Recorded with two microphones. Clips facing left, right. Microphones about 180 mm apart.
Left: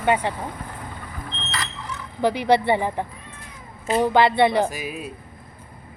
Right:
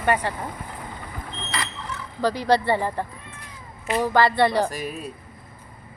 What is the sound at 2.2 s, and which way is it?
A woman's voice, 20° left (ahead or behind).